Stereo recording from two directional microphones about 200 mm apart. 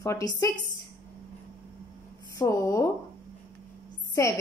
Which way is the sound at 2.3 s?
15° left (ahead or behind).